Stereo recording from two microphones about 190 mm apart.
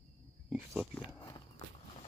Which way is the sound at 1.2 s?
25° left (ahead or behind).